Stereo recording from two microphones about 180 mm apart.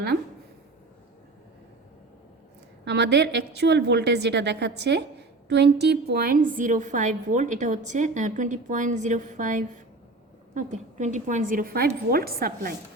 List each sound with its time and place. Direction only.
2.8 s a woman's voice: 70° right (ahead or behind); by 12.7 s 55° right (ahead or behind)